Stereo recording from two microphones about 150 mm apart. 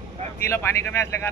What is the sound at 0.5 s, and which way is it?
Speech, 15° left (ahead or behind).